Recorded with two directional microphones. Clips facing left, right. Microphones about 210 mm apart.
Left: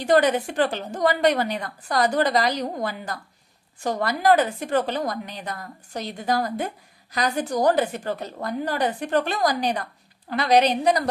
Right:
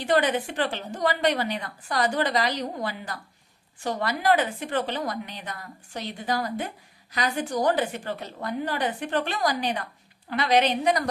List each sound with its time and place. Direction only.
0.0 s a woman's voice: 40° left (ahead or behind)